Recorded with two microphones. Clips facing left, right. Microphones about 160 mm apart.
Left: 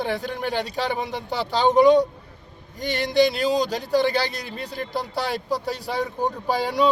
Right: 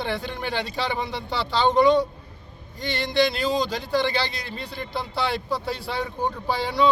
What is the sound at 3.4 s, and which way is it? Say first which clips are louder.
Speech: left 2 dB; 40° left (ahead or behind).